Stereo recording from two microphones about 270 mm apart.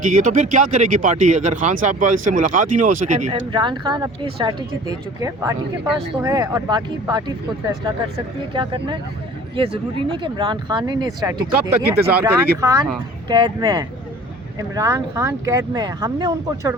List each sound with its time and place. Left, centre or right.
0.0 s speech: right